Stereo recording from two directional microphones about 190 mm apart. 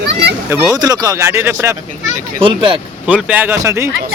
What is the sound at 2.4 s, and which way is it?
Speech, 25° right (ahead or behind).